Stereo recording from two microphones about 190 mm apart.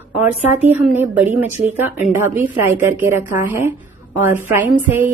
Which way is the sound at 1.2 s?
40° right (ahead or behind).